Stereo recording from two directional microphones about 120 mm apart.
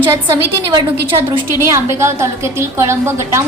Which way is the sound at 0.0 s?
20° right (ahead or behind).